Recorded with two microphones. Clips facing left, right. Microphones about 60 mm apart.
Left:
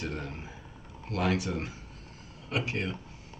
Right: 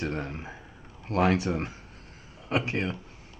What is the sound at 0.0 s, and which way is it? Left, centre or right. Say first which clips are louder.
Speech: right 4 dB; right.